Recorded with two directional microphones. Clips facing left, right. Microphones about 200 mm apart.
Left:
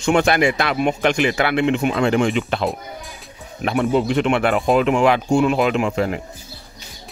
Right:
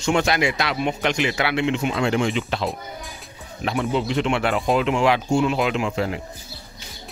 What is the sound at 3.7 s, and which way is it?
Speech, 55° left (ahead or behind).